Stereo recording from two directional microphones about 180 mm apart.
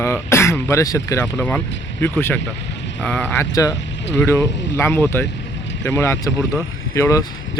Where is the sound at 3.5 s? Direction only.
20° left (ahead or behind).